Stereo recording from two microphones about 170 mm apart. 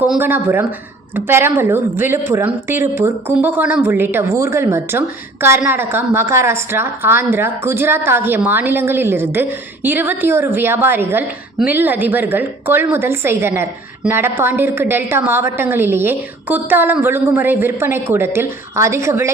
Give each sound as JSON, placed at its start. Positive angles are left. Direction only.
{"t": 0.0, "sound": "a woman's voice", "side_deg": -10}